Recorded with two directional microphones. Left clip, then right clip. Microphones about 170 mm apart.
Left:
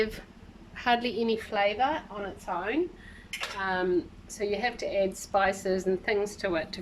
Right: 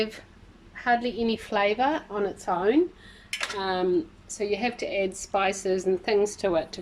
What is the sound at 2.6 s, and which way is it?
Speech, 30° right (ahead or behind).